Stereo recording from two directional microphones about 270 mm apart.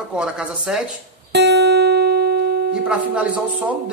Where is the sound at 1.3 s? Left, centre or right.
Right.